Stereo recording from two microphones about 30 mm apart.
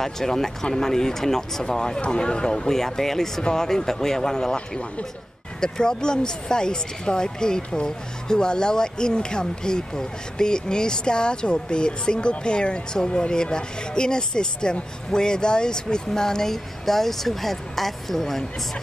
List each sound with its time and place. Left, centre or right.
0.0 s speech: centre
2.0 s speech: left
4.6 s a man's voice: left
5.6 s speech: left; by 18.4 s centre